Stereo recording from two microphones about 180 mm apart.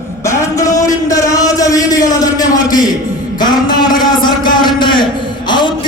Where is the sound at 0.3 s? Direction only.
15° left (ahead or behind).